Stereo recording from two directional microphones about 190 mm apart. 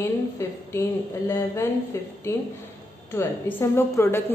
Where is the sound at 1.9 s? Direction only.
15° left (ahead or behind).